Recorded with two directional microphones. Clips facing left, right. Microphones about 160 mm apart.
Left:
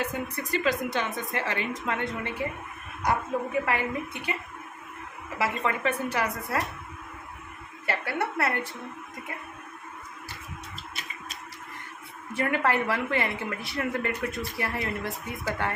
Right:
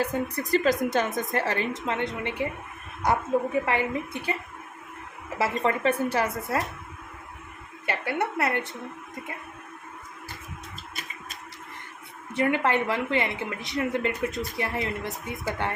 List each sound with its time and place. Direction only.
0.0 s a woman's voice: 35° right (ahead or behind)
1.7 s a woman's voice: 25° right (ahead or behind)
5.4 s a woman's voice: 30° right (ahead or behind)
7.9 s a woman's voice: 20° right (ahead or behind)
12.3 s a woman's voice: 20° right (ahead or behind)